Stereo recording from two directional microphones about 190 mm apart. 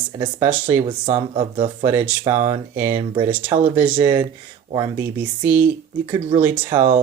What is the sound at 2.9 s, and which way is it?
Speech, 30° right (ahead or behind).